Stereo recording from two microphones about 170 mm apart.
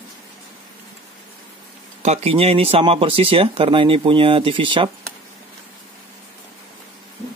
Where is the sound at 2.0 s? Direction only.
40° right (ahead or behind).